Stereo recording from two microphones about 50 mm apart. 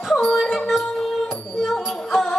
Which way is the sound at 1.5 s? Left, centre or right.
Centre.